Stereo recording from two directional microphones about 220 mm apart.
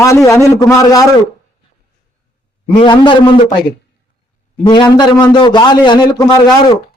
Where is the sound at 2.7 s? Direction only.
20° left (ahead or behind).